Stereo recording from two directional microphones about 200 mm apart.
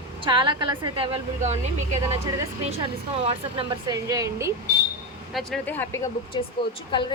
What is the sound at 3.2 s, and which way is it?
Speech, 30° right (ahead or behind).